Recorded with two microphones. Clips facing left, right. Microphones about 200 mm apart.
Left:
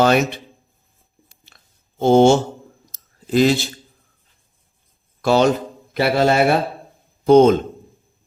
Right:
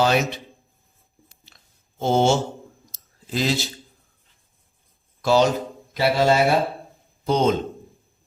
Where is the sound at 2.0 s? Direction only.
55° left (ahead or behind).